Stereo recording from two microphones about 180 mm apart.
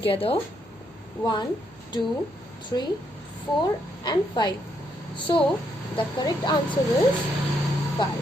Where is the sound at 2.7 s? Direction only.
20° left (ahead or behind).